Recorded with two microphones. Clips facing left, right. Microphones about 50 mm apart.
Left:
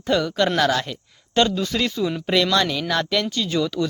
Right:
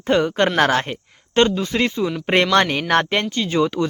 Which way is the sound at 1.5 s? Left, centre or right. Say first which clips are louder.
Right 3 dB; right.